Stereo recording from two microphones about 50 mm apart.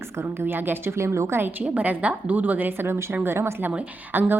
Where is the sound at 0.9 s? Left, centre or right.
Right.